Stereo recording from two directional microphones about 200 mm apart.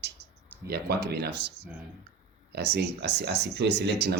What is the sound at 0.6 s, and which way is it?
Speech, 50° right (ahead or behind).